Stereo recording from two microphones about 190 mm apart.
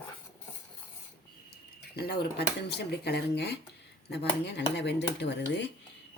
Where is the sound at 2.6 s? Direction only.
60° left (ahead or behind).